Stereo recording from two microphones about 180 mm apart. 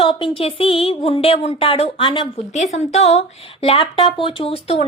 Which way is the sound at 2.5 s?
40° left (ahead or behind).